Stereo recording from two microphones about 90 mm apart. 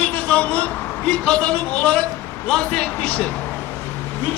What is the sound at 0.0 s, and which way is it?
Vehicle, 15° left (ahead or behind).